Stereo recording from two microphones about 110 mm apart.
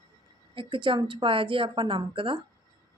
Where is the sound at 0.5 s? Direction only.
50° right (ahead or behind).